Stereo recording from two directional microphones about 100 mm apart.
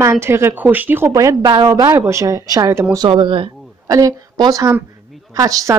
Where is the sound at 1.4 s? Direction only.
45° right (ahead or behind).